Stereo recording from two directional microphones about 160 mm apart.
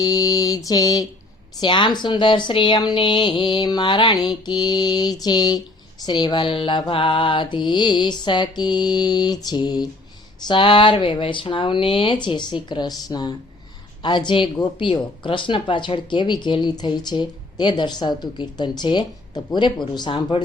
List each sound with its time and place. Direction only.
0.0 s a woman's voice: 20° left (ahead or behind)